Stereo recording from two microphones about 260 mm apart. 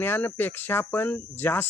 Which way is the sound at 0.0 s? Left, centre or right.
Centre.